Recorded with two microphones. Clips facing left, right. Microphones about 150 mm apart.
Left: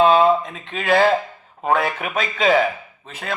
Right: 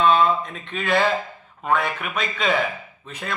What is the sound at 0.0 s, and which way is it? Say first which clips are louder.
Speech: left 4 dB; 35° left (ahead or behind).